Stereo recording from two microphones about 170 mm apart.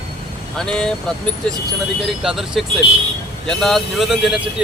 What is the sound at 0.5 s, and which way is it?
Speech, 5° left (ahead or behind).